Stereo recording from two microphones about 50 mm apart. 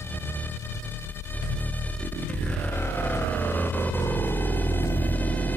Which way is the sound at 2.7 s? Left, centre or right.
Left.